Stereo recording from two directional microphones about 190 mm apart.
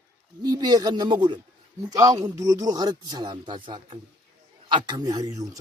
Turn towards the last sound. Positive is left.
turn(degrees=-15)  # may be behind; listen again after turning